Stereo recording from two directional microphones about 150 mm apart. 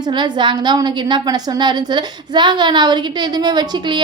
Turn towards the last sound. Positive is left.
turn(degrees=-30)  # may be behind; listen again after turning